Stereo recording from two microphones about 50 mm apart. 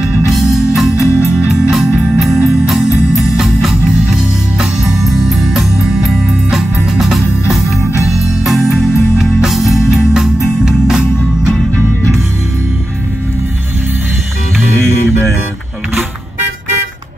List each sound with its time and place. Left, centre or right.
0.3 s music: centre
0.9 s music: left
1.6 s music: centre
7.8 s music: left
8.5 s music: centre